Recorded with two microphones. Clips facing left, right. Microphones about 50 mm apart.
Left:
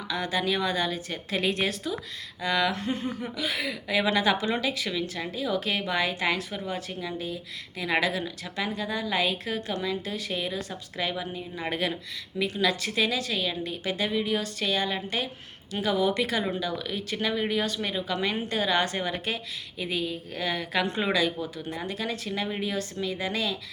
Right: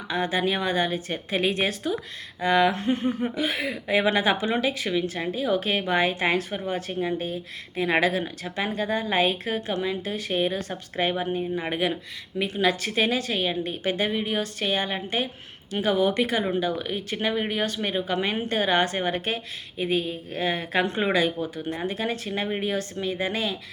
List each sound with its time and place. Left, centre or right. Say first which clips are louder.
0.1 s a woman's voice: right 3 dB; right
11.5 s speech: left 1 dB; centre
12.4 s speech: right 2 dB; right